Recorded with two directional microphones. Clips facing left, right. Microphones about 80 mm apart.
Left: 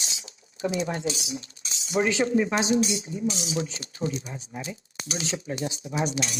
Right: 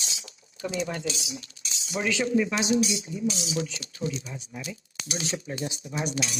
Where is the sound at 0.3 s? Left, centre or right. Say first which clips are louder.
Left 5 dB; left.